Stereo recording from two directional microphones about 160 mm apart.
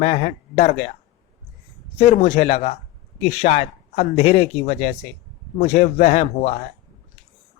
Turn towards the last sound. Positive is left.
turn(degrees=40)  # may be behind; listen again after turning